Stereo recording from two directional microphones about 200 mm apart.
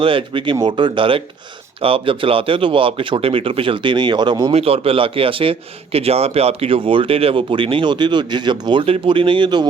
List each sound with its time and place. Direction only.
0.0 s speech: 25° right (ahead or behind)